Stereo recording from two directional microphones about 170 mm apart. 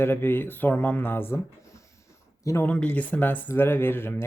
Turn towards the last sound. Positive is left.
turn(degrees=15)  # may be behind; listen again after turning